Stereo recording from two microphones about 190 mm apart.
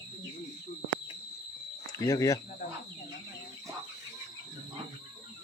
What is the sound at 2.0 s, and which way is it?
Speech, 15° left (ahead or behind).